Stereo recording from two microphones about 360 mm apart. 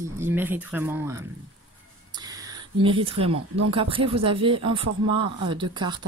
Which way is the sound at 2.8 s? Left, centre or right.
Centre.